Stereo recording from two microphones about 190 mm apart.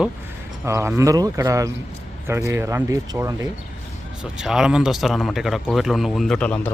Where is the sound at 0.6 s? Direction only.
15° right (ahead or behind).